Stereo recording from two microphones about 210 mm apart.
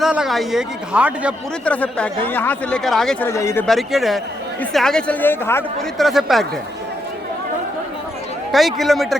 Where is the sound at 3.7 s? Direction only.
Centre (ahead or behind).